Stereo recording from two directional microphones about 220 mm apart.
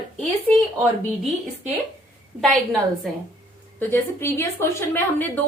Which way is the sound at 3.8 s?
10° left (ahead or behind).